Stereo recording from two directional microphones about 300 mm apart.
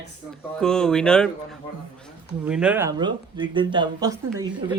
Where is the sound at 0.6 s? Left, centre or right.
Centre.